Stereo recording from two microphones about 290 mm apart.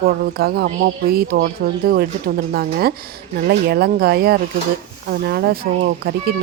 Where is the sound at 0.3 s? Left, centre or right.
Right.